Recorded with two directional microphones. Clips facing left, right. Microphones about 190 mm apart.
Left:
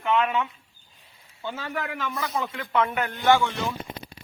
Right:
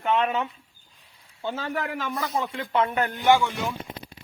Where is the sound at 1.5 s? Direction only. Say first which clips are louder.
Right 2 dB; 30° right (ahead or behind).